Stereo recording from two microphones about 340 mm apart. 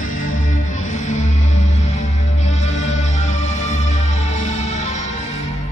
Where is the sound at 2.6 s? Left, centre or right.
Centre.